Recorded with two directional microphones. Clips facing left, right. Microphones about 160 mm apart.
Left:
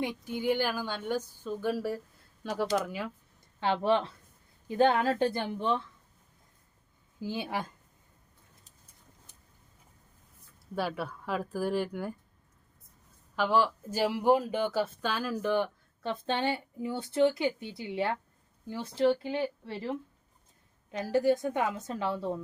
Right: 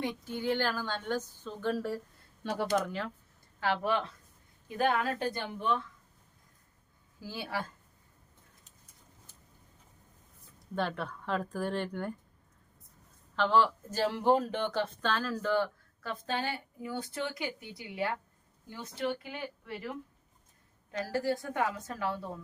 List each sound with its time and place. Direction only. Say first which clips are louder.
0.0 s speech: left 2 dB; 15° left (ahead or behind)
3.6 s a woman's voice: left 4 dB; 25° left (ahead or behind)
7.2 s a woman's voice: left 4 dB; 20° left (ahead or behind)
10.8 s speech: left 1 dB; 5° left (ahead or behind)
13.3 s a woman's voice: even; 10° left (ahead or behind); by 20.0 s 30° left (ahead or behind)
20.9 s a woman's voice: left 6 dB; 20° left (ahead or behind)